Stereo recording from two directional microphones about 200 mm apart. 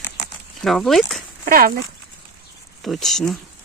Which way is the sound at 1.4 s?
45° right (ahead or behind).